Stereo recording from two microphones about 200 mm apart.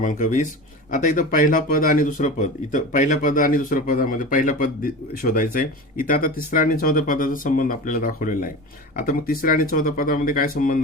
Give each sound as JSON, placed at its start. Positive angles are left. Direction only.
{"t": 0.0, "sound": "speech", "side_deg": 40}